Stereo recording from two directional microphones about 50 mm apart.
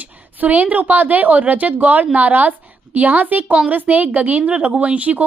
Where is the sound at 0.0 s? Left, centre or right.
Right.